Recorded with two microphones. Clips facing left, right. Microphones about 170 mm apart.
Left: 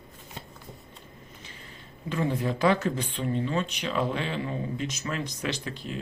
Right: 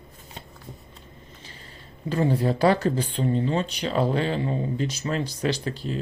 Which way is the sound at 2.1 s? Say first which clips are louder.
Right 5 dB; 35° right (ahead or behind).